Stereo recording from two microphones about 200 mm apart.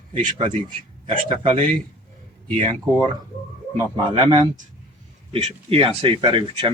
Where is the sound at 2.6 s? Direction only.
20° right (ahead or behind).